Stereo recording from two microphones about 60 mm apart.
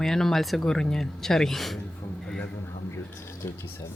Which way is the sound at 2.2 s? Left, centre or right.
Centre.